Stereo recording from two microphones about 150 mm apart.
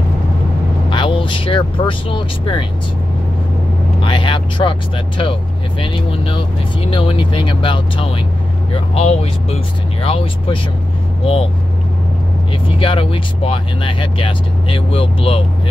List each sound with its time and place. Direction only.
0.8 s speech: 35° left (ahead or behind)
4.0 s speech: 35° left (ahead or behind)
12.6 s speech: 35° left (ahead or behind)